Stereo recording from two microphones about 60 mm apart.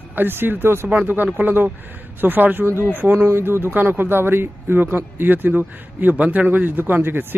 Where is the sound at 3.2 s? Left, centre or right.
Right.